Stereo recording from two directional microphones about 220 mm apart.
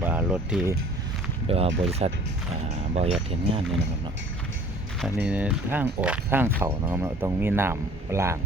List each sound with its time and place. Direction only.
0.0 s speech: 10° right (ahead or behind)
1.5 s speech: 25° right (ahead or behind)
5.1 s speech: 5° right (ahead or behind)